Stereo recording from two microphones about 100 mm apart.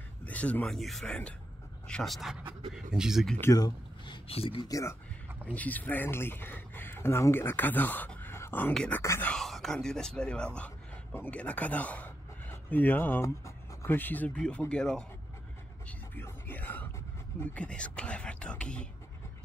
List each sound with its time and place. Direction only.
0.2 s a sound: 15° left (ahead or behind)
0.7 s speech: centre (ahead or behind)
3.5 s speech: 40° left (ahead or behind)
4.3 s speech: 80° left
4.6 s speech: 35° left (ahead or behind)
5.4 s speech: 15° left (ahead or behind)
8.7 s speech: 10° left (ahead or behind)
16.2 s music: 20° left (ahead or behind)
17.4 s speech: 10° left (ahead or behind)